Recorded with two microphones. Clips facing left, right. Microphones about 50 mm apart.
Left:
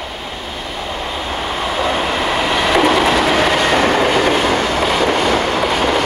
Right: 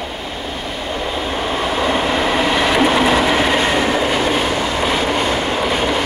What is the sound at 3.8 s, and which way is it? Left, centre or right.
Train, left.